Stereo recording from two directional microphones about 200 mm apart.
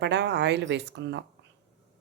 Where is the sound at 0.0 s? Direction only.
60° right (ahead or behind).